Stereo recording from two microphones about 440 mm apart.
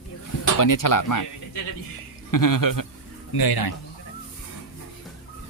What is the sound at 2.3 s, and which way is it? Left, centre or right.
Speech, left.